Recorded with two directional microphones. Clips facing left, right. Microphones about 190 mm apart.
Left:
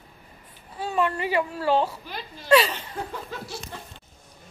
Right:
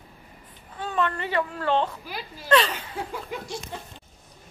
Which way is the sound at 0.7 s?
10° left (ahead or behind).